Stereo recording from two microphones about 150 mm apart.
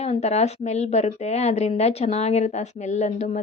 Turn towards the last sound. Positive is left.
turn(degrees=50)  # may be behind; listen again after turning